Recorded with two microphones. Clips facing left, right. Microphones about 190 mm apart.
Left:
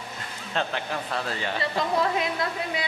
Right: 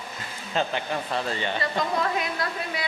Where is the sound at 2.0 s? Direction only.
25° left (ahead or behind).